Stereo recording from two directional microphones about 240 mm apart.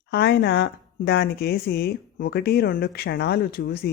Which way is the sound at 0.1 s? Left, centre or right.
Left.